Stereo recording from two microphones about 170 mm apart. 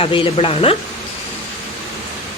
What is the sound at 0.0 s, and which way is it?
Speech, 30° left (ahead or behind).